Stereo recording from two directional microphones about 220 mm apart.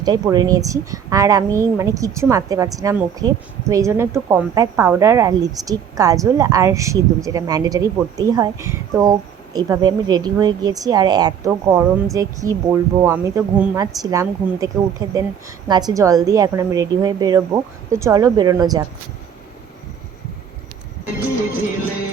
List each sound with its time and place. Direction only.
0.0 s a woman's voice: 20° right (ahead or behind)